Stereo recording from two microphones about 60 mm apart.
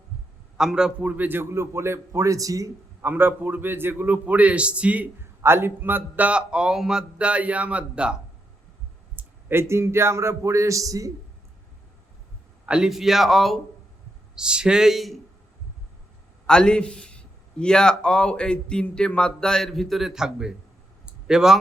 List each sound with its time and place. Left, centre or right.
0.5 s a man's voice: centre; by 2.7 s right
3.0 s a man's voice: right
5.2 s a man's voice: right
6.2 s speech: centre
9.1 s a man's voice: right
12.6 s a man's voice: centre
12.9 s speech: centre
14.3 s speech: centre
16.5 s a man's voice: centre
21.1 s a sound: centre